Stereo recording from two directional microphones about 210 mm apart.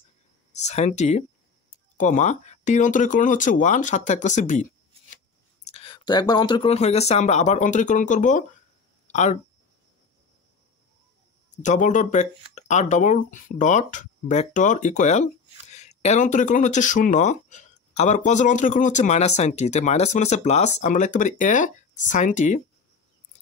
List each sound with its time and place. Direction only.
0.6 s speech: 30° left (ahead or behind)
11.5 s speech: 35° left (ahead or behind)